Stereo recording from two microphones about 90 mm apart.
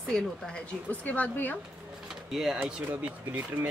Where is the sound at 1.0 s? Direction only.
20° left (ahead or behind).